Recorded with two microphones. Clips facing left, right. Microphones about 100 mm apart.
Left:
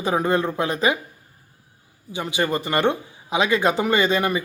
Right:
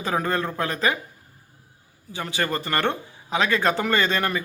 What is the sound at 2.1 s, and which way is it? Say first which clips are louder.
Speech: left 3 dB; 15° left (ahead or behind).